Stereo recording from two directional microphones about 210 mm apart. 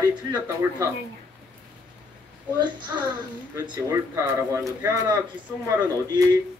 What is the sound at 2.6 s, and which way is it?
Speech, 20° right (ahead or behind).